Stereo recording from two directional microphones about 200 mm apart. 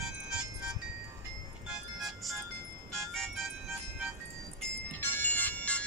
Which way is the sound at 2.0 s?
Centre (ahead or behind).